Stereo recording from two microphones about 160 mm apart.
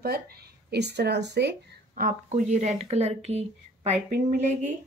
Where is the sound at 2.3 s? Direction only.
45° right (ahead or behind).